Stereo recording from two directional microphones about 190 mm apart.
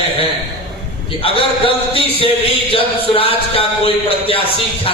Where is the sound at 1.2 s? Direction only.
30° left (ahead or behind).